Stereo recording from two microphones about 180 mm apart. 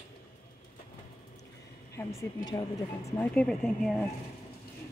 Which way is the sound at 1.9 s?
20° left (ahead or behind).